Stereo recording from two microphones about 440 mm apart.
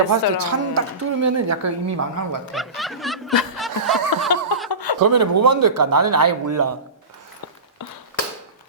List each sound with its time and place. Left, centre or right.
0.1 s a woman's voice: right
2.5 s snicker: centre
4.9 s speech: right